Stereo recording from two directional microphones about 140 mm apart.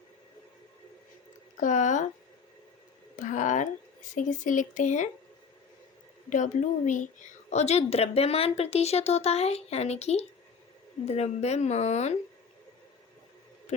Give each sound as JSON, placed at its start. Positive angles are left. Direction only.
{"t": 1.5, "sound": "speech", "side_deg": 65}
{"t": 3.2, "sound": "speech", "side_deg": 65}
{"t": 6.3, "sound": "speech", "side_deg": 65}
{"t": 7.5, "sound": "speech", "side_deg": 50}
{"t": 13.7, "sound": "speech", "side_deg": 50}